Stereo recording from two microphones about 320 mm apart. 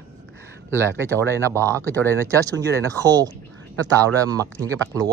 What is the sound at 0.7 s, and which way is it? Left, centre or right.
Speech, centre.